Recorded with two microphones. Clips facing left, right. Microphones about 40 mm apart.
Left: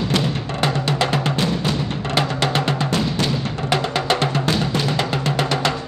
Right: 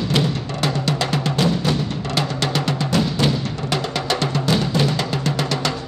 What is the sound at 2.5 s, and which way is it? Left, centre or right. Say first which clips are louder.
Drum: even; left.